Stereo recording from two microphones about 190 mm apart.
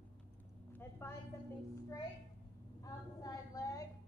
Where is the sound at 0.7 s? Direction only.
15° left (ahead or behind).